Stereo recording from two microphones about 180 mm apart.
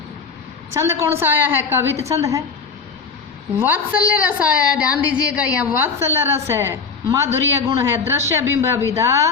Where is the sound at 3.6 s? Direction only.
10° right (ahead or behind).